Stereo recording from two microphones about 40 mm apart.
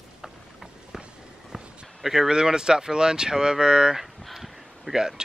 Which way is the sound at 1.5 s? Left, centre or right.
Centre.